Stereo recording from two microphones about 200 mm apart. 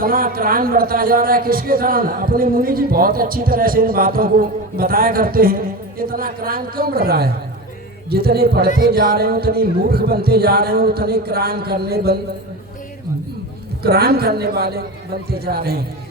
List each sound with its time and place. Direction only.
0.0 s speech: 45° right (ahead or behind)
13.8 s speech: 50° right (ahead or behind)